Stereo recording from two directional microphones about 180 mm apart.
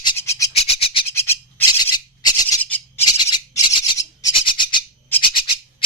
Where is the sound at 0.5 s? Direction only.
35° left (ahead or behind).